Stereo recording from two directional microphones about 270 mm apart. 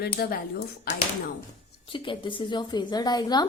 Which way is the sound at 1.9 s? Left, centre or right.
Centre.